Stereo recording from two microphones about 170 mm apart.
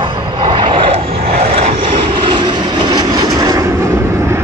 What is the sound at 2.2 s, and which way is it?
Vehicle, 30° right (ahead or behind).